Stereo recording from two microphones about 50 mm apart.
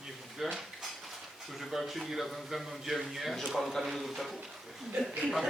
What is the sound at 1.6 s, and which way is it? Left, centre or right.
A man's voice, centre.